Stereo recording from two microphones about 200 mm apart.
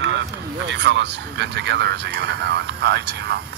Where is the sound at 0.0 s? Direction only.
65° right (ahead or behind).